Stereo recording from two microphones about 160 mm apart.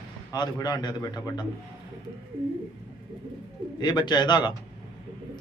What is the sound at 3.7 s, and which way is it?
Speech, 25° left (ahead or behind).